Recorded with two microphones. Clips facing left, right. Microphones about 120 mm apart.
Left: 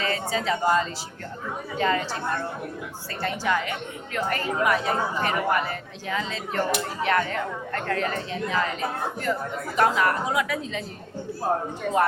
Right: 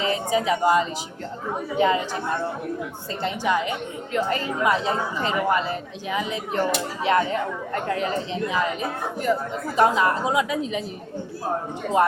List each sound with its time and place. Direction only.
0.0 s speech: 20° right (ahead or behind)
3.2 s a woman's voice: 20° right (ahead or behind)